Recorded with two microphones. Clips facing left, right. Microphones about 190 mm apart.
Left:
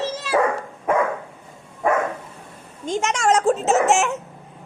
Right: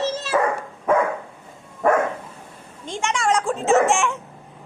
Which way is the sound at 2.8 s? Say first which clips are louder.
Left 3 dB; 40° left (ahead or behind).